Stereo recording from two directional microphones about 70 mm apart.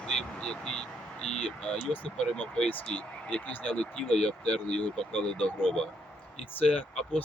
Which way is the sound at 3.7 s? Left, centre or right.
Centre.